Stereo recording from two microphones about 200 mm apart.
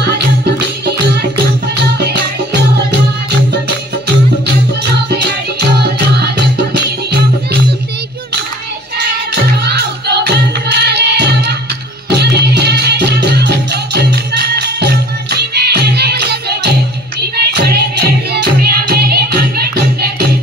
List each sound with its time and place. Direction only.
5.8 s music: 55° right (ahead or behind)
9.3 s music: 55° right (ahead or behind)